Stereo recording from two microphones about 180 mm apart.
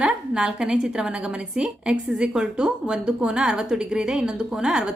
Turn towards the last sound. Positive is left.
turn(degrees=-5)  # may be behind; listen again after turning